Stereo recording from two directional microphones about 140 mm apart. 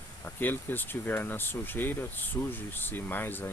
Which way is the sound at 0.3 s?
15° left (ahead or behind).